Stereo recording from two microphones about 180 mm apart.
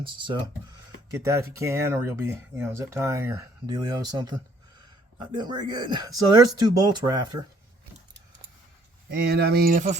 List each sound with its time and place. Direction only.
0.0 s speech: 25° right (ahead or behind)
1.1 s speech: 15° right (ahead or behind)
9.0 s speech: 60° right (ahead or behind)